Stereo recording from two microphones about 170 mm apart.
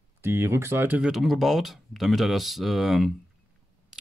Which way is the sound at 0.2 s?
15° right (ahead or behind).